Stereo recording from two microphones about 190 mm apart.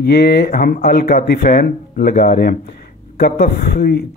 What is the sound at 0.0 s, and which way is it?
A man's voice, 60° left (ahead or behind).